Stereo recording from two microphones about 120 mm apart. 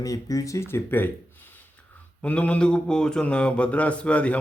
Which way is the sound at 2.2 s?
10° left (ahead or behind).